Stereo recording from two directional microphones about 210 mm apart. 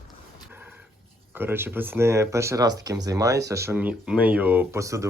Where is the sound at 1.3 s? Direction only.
10° right (ahead or behind).